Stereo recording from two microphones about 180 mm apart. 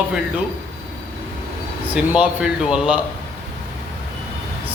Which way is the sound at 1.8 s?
5° right (ahead or behind).